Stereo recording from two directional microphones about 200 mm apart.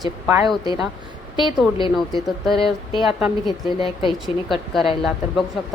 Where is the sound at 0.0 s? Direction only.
20° right (ahead or behind).